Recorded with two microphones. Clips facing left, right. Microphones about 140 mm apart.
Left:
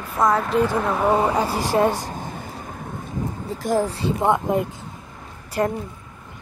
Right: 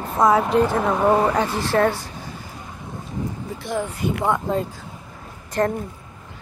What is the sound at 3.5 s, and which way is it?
Speech, 40° left (ahead or behind).